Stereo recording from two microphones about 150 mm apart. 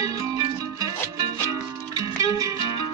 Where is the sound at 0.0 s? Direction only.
25° right (ahead or behind).